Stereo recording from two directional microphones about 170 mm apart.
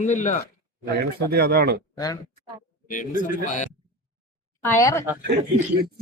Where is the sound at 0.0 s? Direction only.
45° left (ahead or behind).